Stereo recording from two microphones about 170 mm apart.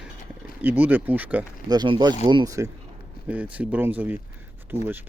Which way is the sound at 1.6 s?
25° right (ahead or behind).